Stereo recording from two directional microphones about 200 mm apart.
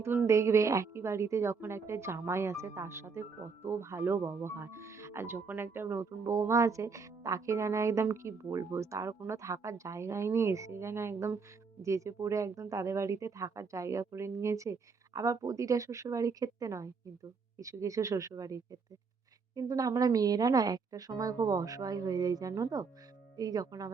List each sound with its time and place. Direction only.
0.0 s a woman's voice: 10° right (ahead or behind)